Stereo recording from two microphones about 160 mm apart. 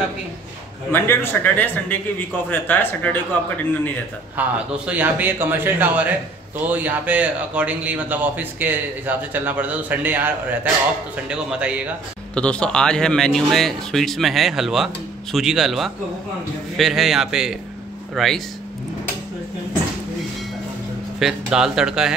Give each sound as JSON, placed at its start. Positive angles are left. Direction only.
{"t": 0.9, "sound": "a man's voice", "side_deg": 15}
{"t": 4.4, "sound": "speech", "side_deg": -10}
{"t": 12.4, "sound": "speech", "side_deg": 5}
{"t": 21.2, "sound": "speech", "side_deg": -5}